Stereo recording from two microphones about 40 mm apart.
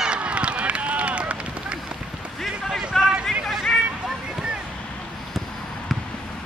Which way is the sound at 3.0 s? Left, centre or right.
Centre.